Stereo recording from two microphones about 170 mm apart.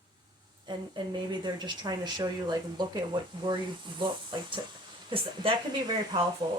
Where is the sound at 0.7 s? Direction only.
25° right (ahead or behind).